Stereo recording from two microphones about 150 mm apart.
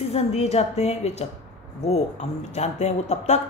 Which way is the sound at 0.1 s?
45° left (ahead or behind).